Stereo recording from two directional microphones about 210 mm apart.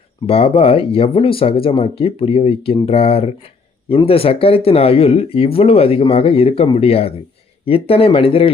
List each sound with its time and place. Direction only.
0.3 s speech: 25° left (ahead or behind)